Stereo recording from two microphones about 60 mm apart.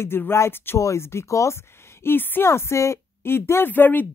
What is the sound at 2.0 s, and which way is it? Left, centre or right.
A woman's voice, left.